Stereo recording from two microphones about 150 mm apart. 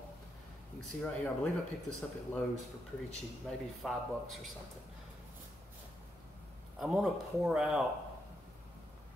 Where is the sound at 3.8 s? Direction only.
Centre (ahead or behind).